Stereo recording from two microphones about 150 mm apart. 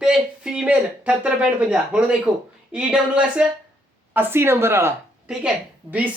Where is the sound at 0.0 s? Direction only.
5° right (ahead or behind).